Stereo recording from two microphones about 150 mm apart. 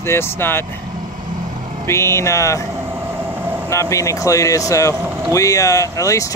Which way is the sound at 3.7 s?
20° left (ahead or behind).